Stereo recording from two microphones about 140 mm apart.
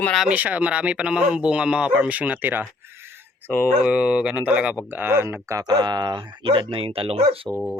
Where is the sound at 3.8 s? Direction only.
5° right (ahead or behind); by 7.3 s 45° right (ahead or behind).